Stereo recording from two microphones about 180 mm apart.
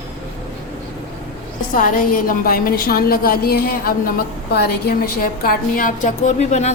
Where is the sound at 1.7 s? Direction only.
50° left (ahead or behind).